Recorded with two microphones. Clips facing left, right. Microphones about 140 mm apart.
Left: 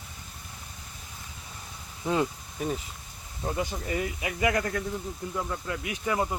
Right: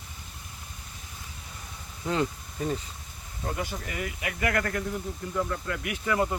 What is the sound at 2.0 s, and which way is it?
Speech, 15° left (ahead or behind).